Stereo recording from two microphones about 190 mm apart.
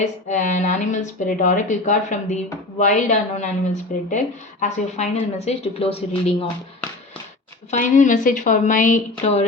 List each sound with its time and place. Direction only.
0.0 s a woman's voice: 40° left (ahead or behind)
7.7 s a woman's voice: 40° left (ahead or behind)